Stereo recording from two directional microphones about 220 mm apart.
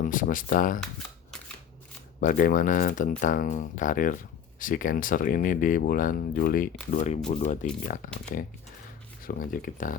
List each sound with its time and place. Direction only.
0.0 s speech: 40° left (ahead or behind)
2.2 s speech: 35° left (ahead or behind)
9.2 s speech: 40° left (ahead or behind)